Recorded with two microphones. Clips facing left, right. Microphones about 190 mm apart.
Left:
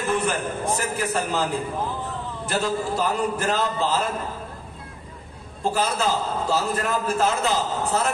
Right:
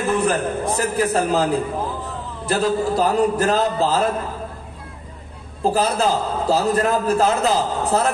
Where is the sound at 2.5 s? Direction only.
35° right (ahead or behind).